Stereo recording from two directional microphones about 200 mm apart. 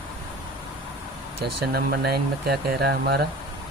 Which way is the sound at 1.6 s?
55° right (ahead or behind).